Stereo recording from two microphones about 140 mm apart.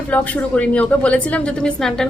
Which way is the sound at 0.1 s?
10° left (ahead or behind).